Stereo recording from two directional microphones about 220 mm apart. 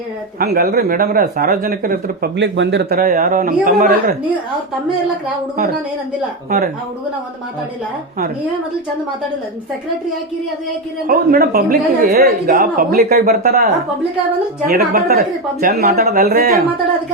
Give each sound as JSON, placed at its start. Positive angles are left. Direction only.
{"t": 0.3, "sound": "speech", "side_deg": -45}
{"t": 11.0, "sound": "speech", "side_deg": -40}
{"t": 14.7, "sound": "speech", "side_deg": -45}